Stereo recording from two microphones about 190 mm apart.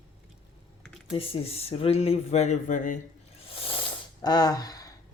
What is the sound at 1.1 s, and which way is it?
Speech, 30° left (ahead or behind).